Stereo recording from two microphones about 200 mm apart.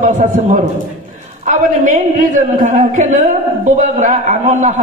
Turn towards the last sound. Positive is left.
turn(degrees=-40)  # may be behind; listen again after turning